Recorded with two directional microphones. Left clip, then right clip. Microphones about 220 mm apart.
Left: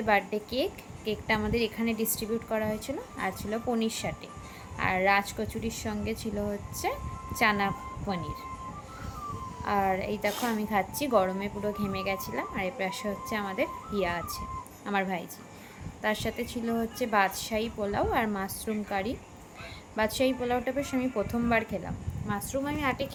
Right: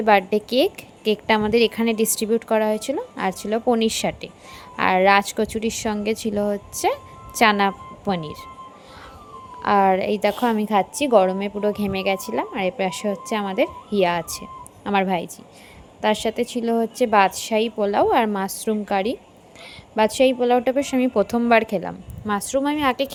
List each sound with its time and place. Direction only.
0.0 s a woman's voice: 40° right (ahead or behind)
9.6 s a woman's voice: 40° right (ahead or behind)